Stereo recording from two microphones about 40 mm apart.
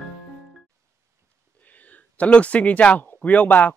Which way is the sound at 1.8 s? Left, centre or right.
Left.